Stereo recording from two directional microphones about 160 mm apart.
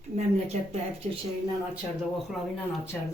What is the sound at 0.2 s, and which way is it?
Speech, 45° right (ahead or behind).